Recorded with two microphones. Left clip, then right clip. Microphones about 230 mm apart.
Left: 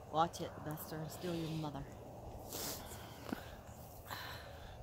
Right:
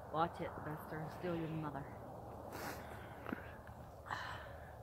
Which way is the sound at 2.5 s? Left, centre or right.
Left.